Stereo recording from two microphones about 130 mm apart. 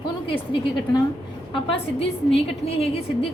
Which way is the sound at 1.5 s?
45° left (ahead or behind).